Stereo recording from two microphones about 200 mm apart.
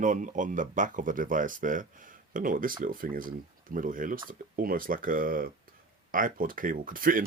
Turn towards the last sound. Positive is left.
turn(degrees=-45)  # may be behind; listen again after turning